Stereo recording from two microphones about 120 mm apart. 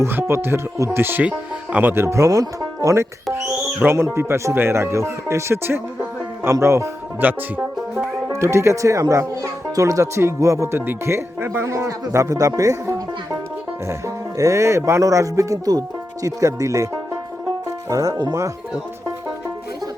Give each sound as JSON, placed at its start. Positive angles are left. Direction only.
{"t": 0.0, "sound": "speech", "side_deg": -20}
{"t": 14.3, "sound": "speech", "side_deg": -25}